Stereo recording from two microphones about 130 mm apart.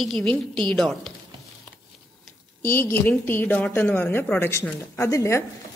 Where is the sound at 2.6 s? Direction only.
15° left (ahead or behind).